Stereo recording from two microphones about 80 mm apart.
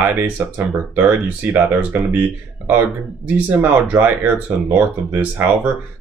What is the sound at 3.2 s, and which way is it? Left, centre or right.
Speech, centre.